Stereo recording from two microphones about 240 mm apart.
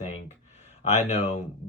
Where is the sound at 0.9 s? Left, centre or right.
Left.